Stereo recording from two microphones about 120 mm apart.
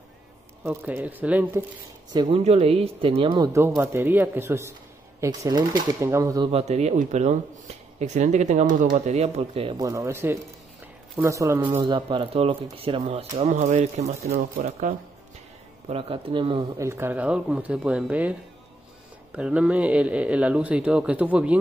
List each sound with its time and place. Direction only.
0.7 s speech: 10° right (ahead or behind)
2.3 s speech: 60° right (ahead or behind); by 3.4 s 45° right (ahead or behind)
3.5 s speech: 25° right (ahead or behind)
5.9 s speech: 25° right (ahead or behind)
6.5 s speech: 65° right (ahead or behind)
9.8 s speech: 25° right (ahead or behind)
11.6 s speech: 40° right (ahead or behind)
13.4 s speech: 80° right
15.9 s speech: 50° right (ahead or behind)
16.7 s speech: 25° right (ahead or behind)
19.3 s speech: 10° right (ahead or behind)